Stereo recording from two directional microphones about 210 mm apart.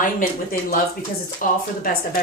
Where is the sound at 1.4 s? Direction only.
40° left (ahead or behind).